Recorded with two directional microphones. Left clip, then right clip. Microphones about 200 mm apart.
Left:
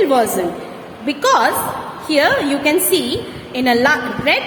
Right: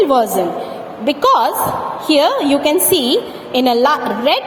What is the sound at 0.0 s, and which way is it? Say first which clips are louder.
A woman's voice: right 2 dB; 30° right (ahead or behind).